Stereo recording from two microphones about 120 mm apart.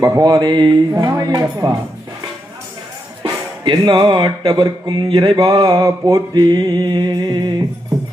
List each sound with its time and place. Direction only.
0.0 s speech: 30° right (ahead or behind)
3.6 s speech: 40° right (ahead or behind)